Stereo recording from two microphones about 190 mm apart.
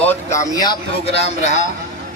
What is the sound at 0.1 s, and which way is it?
Speech, 15° left (ahead or behind).